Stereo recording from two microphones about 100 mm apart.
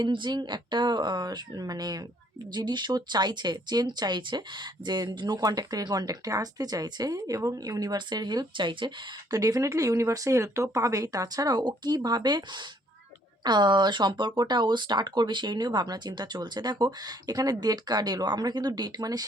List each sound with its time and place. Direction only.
0.0 s speech: 50° right (ahead or behind)
9.3 s speech: 35° right (ahead or behind)